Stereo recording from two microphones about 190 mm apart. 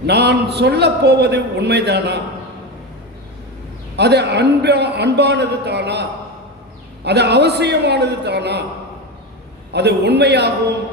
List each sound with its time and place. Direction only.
0.0 s a man's voice: 60° right (ahead or behind)
3.9 s a man's voice: 60° right (ahead or behind)
9.7 s a man's voice: 60° right (ahead or behind)